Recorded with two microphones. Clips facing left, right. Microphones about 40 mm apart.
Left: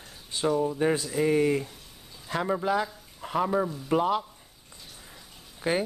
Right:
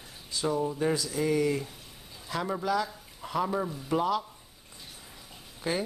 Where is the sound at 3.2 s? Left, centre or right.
Centre.